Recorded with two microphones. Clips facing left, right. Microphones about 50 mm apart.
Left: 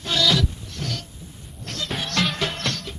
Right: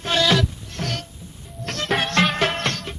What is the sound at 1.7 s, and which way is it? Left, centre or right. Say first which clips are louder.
Music: right 4 dB; right.